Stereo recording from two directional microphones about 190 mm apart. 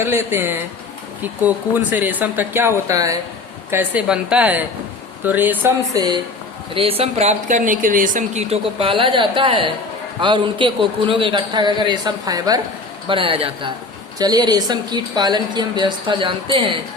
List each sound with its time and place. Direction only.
0.0 s speech: 10° right (ahead or behind)
6.7 s speech: 30° right (ahead or behind)